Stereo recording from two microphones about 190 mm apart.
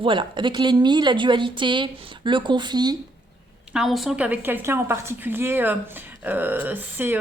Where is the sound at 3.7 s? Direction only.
Centre (ahead or behind).